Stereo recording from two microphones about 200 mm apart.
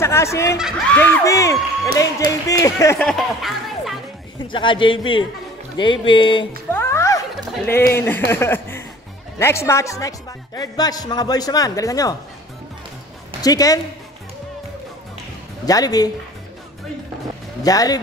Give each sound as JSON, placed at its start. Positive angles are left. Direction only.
{"t": 0.0, "sound": "speech", "side_deg": 15}
{"t": 0.6, "sound": "speech", "side_deg": 0}
{"t": 3.0, "sound": "music", "side_deg": 0}
{"t": 4.4, "sound": "a man's voice", "side_deg": 25}
{"t": 6.7, "sound": "music", "side_deg": 10}
{"t": 7.6, "sound": "speech", "side_deg": 10}
{"t": 13.4, "sound": "a woman's voice", "side_deg": 20}
{"t": 15.6, "sound": "a man's voice", "side_deg": 20}
{"t": 17.6, "sound": "a man's voice", "side_deg": 20}